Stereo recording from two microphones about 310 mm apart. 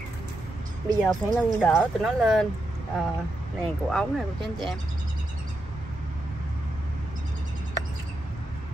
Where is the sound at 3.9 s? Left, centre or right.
Centre.